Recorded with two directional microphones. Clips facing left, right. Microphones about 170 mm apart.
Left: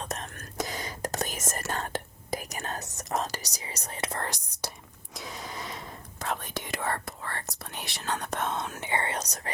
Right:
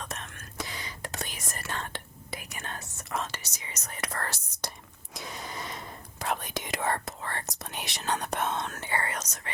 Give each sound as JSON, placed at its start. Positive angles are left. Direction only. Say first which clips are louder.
{"t": 0.0, "sound": "whispering", "louder": "left 4 dB", "side_deg": 35}
{"t": 2.9, "sound": "speech", "louder": "left 3 dB", "side_deg": 40}
{"t": 5.1, "sound": "a sound", "louder": "even", "side_deg": 0}
{"t": 6.1, "sound": "whispering", "louder": "right 1 dB", "side_deg": -15}
{"t": 8.5, "sound": "speech", "louder": "left 1 dB", "side_deg": 10}